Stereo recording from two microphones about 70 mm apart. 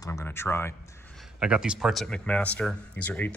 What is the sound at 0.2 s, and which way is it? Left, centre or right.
Speech, left.